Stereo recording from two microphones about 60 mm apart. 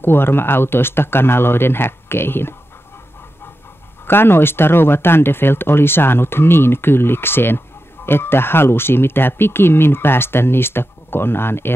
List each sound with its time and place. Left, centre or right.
0.0 s speech: left
4.1 s speech: left